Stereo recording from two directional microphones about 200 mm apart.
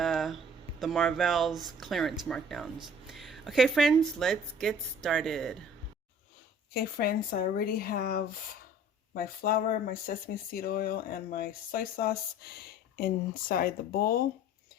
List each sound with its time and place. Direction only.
0.0 s music: centre (ahead or behind)
0.8 s speech: centre (ahead or behind)
6.7 s speech: 45° left (ahead or behind)